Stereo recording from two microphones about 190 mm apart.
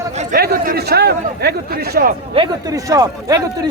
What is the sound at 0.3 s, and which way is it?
A man's voice, 50° right (ahead or behind).